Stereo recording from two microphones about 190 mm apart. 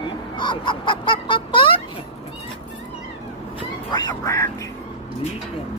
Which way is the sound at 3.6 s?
20° left (ahead or behind).